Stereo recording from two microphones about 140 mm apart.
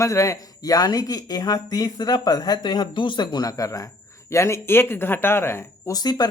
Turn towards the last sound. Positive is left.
turn(degrees=30)  # may be behind; listen again after turning